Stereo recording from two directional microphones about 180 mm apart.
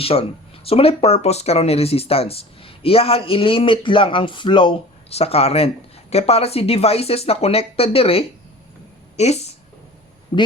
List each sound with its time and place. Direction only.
0.0 s a man's voice: 30° left (ahead or behind)